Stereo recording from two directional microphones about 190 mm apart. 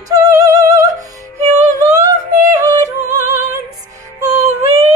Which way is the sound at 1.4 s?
35° right (ahead or behind).